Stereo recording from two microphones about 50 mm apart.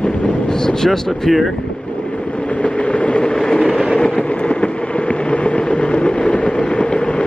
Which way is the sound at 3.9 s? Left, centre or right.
Left.